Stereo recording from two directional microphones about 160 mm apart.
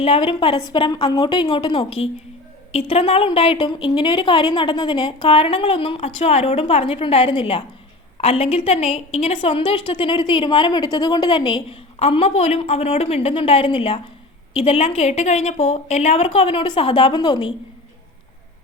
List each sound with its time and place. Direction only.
0.0 s a woman's voice: 35° left (ahead or behind)